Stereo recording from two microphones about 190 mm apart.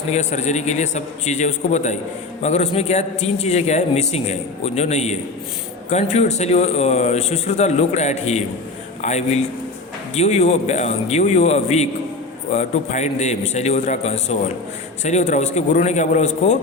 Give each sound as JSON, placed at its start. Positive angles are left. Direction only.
{"t": 0.1, "sound": "a man's voice", "side_deg": 35}